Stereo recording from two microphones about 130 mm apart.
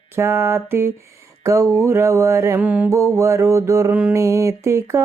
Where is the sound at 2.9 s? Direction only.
25° right (ahead or behind).